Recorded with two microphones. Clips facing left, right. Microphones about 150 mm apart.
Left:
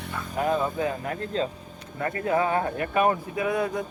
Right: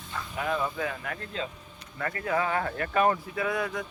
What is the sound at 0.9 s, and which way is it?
Speech, 35° left (ahead or behind).